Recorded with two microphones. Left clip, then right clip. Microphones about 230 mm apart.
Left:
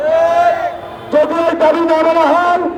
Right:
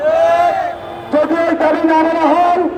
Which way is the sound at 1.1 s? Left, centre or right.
Left.